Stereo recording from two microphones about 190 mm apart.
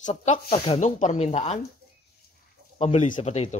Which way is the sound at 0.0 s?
40° left (ahead or behind).